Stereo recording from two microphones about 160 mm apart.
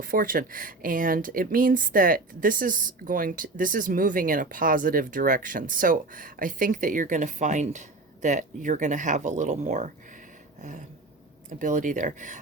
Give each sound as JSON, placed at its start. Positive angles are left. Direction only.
{"t": 0.0, "sound": "speech", "side_deg": -60}
{"t": 10.6, "sound": "a sound", "side_deg": -50}
{"t": 11.4, "sound": "speech", "side_deg": -55}